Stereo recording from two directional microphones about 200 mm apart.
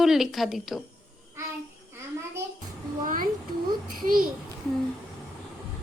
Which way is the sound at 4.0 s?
45° right (ahead or behind).